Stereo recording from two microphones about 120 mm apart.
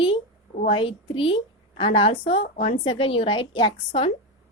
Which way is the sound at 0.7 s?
45° left (ahead or behind).